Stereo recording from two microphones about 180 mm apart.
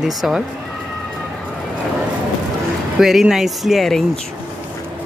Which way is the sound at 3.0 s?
Centre (ahead or behind).